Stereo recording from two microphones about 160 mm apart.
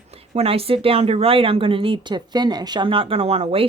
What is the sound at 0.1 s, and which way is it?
Speech, 40° right (ahead or behind).